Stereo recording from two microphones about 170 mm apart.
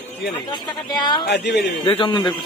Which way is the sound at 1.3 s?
80° left.